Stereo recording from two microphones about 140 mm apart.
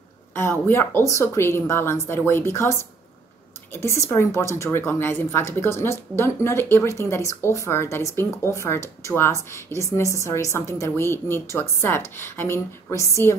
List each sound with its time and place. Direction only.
0.3 s a woman's voice: 15° left (ahead or behind)